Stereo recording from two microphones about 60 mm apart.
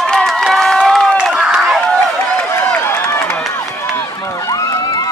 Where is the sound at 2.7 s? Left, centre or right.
Left.